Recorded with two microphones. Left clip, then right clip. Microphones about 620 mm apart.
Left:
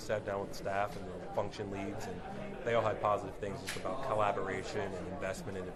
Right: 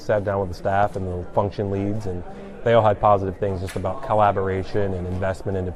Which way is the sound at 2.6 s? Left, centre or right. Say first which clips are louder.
Right 15 dB; right.